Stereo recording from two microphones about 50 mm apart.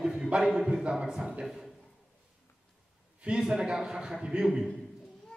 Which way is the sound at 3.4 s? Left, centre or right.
Centre.